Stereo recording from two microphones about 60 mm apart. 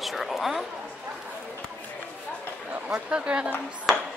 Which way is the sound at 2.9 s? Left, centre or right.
Right.